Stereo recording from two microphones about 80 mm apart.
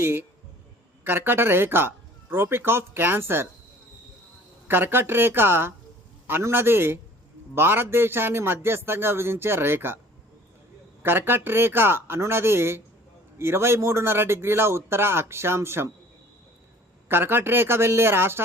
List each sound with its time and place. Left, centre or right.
0.0 s a man's voice: right
4.7 s a man's voice: right
11.0 s a man's voice: right
17.1 s a man's voice: right